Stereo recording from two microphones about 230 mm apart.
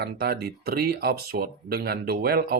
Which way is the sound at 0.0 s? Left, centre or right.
Right.